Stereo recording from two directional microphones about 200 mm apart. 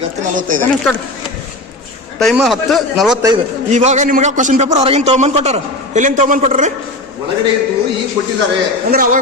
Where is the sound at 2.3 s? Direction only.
Centre (ahead or behind).